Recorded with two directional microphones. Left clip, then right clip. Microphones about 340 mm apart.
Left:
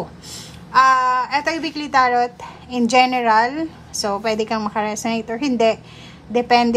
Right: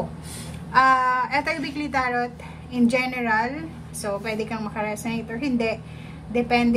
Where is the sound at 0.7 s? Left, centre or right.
Centre.